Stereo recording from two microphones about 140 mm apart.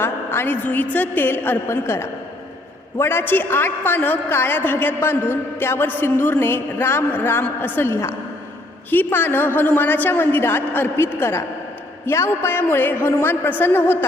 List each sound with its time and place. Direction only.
0.0 s a woman's voice: 15° left (ahead or behind)